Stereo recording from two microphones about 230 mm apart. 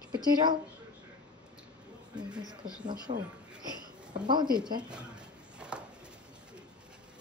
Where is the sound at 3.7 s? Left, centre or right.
Centre.